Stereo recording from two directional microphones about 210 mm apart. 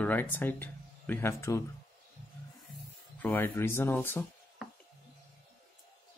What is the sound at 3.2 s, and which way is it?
Speech, 10° left (ahead or behind).